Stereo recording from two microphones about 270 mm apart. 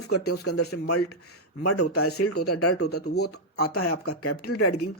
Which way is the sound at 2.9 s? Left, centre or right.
Left.